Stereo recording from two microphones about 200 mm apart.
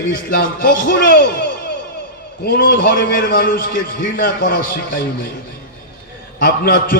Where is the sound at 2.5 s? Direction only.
45° left (ahead or behind).